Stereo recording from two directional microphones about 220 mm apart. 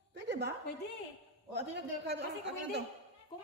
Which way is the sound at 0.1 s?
50° right (ahead or behind).